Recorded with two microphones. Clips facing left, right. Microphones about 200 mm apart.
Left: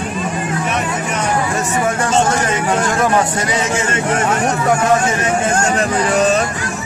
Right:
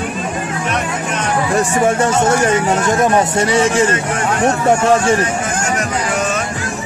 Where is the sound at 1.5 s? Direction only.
30° right (ahead or behind).